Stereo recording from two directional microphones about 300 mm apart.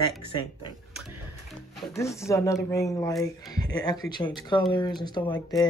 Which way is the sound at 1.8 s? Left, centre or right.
Centre.